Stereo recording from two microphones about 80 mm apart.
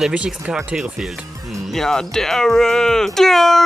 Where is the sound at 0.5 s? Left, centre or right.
Centre.